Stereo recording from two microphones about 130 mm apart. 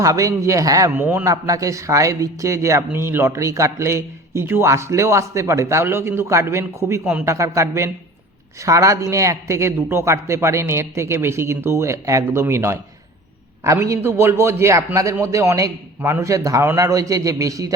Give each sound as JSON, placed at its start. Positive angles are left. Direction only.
{"t": 0.0, "sound": "a man's voice", "side_deg": -25}
{"t": 0.9, "sound": "a man's voice", "side_deg": -15}
{"t": 1.2, "sound": "a man's voice", "side_deg": -25}
{"t": 7.0, "sound": "a man's voice", "side_deg": -10}
{"t": 7.3, "sound": "a man's voice", "side_deg": -25}